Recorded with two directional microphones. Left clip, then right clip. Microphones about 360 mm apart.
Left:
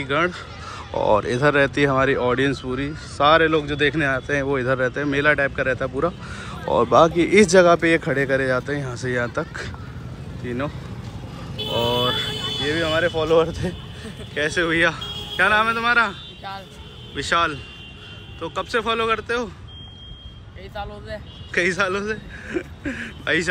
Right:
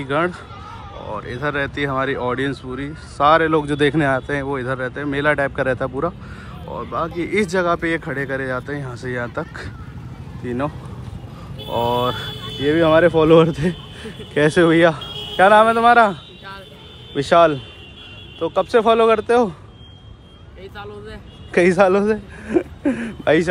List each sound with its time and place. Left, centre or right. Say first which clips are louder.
0.0 s speech: right 1 dB; centre
11.9 s speech: even; centre
12.3 s a sound: left 3 dB; left
12.6 s speech: right 8 dB; centre
20.7 s speech: left 3 dB; centre
21.5 s speech: right 7 dB; centre